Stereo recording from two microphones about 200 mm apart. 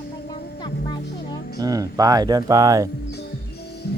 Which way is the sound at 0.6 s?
20° left (ahead or behind).